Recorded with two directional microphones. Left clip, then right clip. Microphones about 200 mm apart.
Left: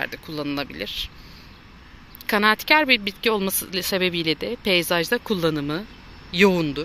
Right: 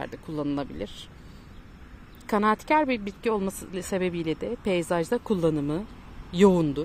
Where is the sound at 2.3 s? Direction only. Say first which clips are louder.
Left 5 dB; 10° right (ahead or behind).